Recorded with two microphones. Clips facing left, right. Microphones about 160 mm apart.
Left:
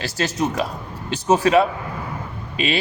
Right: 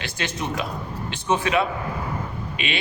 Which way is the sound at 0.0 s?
40° left (ahead or behind).